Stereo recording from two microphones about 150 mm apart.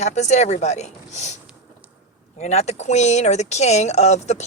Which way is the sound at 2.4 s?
45° left (ahead or behind).